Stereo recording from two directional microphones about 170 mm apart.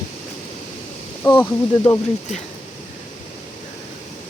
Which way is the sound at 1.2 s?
10° left (ahead or behind).